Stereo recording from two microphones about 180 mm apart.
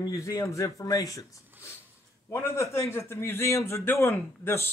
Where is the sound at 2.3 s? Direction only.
15° left (ahead or behind).